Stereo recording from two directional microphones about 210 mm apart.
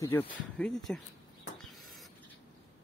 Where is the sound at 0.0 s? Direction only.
10° left (ahead or behind).